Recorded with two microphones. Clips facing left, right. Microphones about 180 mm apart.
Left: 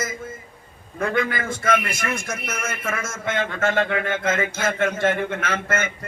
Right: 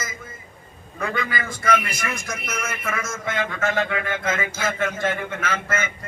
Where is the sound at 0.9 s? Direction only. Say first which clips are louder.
Left 4 dB; 50° left (ahead or behind).